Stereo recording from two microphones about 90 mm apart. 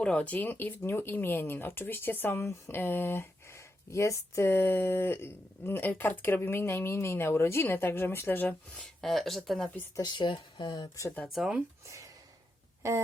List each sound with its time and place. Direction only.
0.0 s speech: 15° left (ahead or behind)
9.0 s speech: centre (ahead or behind)
10.0 s speech: 60° left (ahead or behind)
11.3 s speech: centre (ahead or behind)
12.8 s a sound: 35° right (ahead or behind)